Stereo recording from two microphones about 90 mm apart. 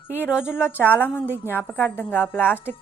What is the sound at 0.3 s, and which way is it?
Speech, 10° right (ahead or behind).